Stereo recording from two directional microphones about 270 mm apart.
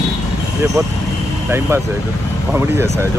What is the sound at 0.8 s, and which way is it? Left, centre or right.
Speech, centre.